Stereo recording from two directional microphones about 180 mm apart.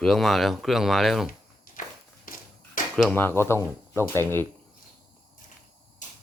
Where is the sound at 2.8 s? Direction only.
50° left (ahead or behind).